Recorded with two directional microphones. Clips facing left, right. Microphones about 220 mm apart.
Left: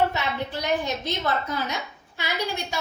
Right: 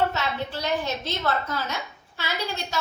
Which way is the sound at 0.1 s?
15° left (ahead or behind).